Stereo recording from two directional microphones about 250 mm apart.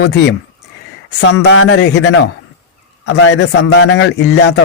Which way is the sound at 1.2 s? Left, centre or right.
Left.